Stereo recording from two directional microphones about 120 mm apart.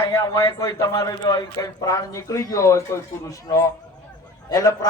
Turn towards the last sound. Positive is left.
turn(degrees=30)  # may be behind; listen again after turning